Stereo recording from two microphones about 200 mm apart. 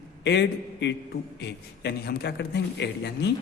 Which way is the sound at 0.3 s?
60° left (ahead or behind).